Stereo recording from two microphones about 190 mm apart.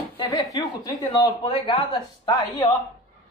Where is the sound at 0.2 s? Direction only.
20° left (ahead or behind).